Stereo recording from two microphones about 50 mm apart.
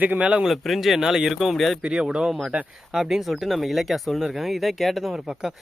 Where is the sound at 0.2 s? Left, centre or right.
Right.